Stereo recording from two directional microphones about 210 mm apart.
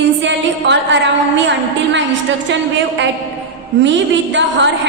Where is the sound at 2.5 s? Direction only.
60° right (ahead or behind).